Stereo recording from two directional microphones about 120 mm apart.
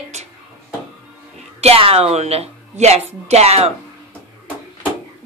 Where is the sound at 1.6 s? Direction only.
55° right (ahead or behind).